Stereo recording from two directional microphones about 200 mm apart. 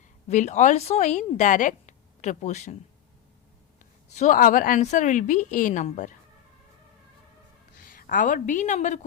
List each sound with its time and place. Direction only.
0.3 s a woman's voice: 35° left (ahead or behind)
4.1 s a woman's voice: 40° left (ahead or behind)
7.9 s a woman's voice: 45° left (ahead or behind)